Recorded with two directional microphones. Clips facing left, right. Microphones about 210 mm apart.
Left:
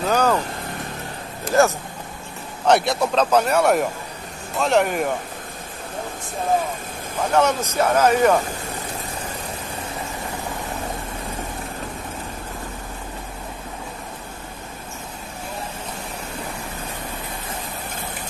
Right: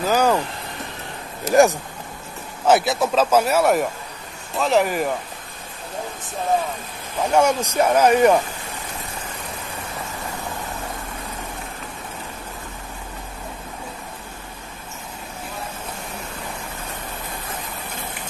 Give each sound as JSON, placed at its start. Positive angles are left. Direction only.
{"t": 0.0, "sound": "vehicle", "side_deg": -10}
{"t": 1.5, "sound": "speech", "side_deg": -15}
{"t": 2.6, "sound": "speech", "side_deg": -5}
{"t": 7.2, "sound": "speech", "side_deg": -10}